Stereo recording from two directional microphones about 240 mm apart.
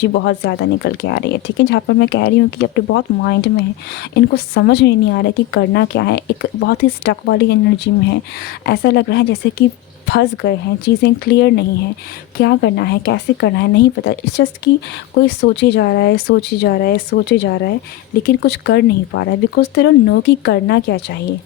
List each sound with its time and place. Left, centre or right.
0.0 s speech: left
8.6 s speech: left